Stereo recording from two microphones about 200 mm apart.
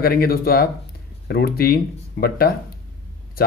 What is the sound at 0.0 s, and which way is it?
Speech, 50° left (ahead or behind).